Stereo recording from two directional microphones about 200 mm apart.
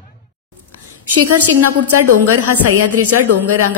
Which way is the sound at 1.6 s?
90° right.